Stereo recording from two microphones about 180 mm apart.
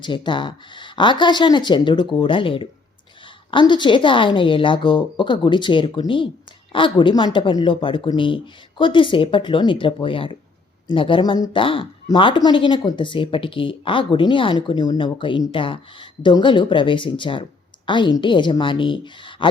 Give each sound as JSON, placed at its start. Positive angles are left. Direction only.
{"t": 0.0, "sound": "a woman's voice", "side_deg": 25}